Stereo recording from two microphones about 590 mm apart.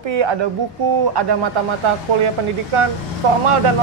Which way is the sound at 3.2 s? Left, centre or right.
Right.